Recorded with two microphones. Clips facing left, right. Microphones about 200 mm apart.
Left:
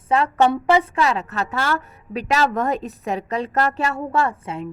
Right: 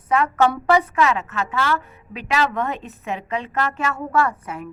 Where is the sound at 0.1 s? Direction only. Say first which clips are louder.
Even; 30° left (ahead or behind).